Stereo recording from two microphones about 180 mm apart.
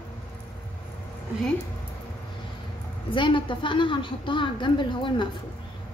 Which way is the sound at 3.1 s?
25° left (ahead or behind).